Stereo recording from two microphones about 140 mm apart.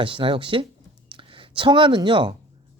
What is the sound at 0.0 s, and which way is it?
Speech, 40° right (ahead or behind).